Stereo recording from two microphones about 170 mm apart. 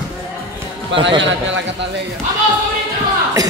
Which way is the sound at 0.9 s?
90° right.